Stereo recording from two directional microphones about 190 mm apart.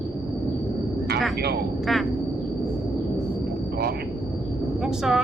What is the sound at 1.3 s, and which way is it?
Speech, 55° right (ahead or behind).